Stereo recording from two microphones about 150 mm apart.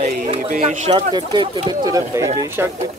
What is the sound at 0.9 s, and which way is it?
Speech, 30° right (ahead or behind).